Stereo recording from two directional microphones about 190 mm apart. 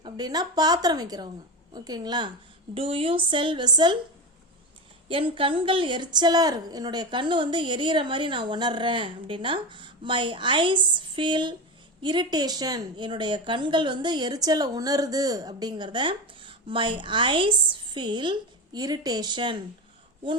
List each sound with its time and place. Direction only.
0.0 s a woman's voice: 20° right (ahead or behind)
5.0 s a woman's voice: 30° right (ahead or behind)